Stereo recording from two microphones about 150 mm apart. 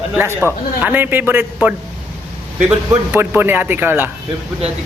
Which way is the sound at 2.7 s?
10° right (ahead or behind).